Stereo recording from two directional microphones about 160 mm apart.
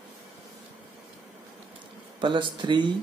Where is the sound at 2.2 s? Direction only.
30° right (ahead or behind).